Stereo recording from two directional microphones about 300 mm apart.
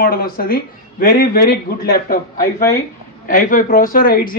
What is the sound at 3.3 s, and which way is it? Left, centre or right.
A man's voice, left.